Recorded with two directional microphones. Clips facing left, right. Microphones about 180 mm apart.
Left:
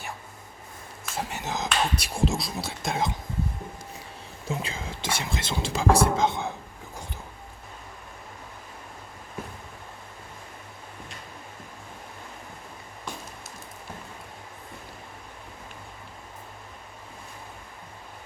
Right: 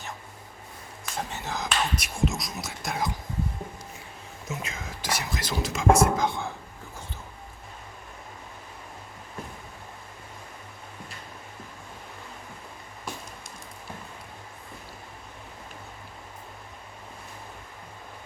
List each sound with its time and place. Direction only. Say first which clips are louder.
1.0 s a sound: left 1 dB; 5° left (ahead or behind)
1.4 s speech: left 2 dB; 20° left (ahead or behind)
4.4 s speech: left 4 dB; 30° left (ahead or behind)